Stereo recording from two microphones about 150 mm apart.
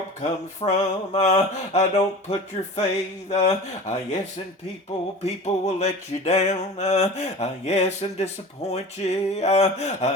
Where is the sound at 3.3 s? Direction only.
50° left (ahead or behind).